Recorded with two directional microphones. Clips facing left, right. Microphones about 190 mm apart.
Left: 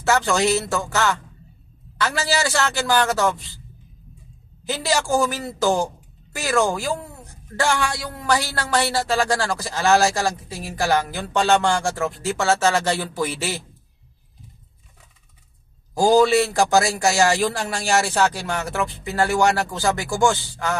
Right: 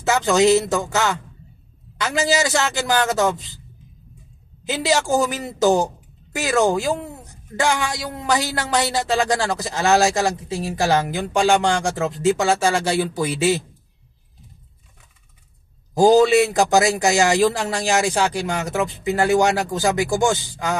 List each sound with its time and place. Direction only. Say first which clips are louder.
0.0 s a man's voice: right 3 dB; 15° right (ahead or behind)
4.6 s a woman's voice: right 2 dB; 20° right (ahead or behind)
16.0 s a man's voice: right 3 dB; 20° right (ahead or behind)